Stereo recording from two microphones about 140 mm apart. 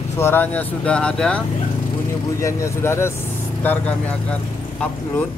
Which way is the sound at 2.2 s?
20° left (ahead or behind).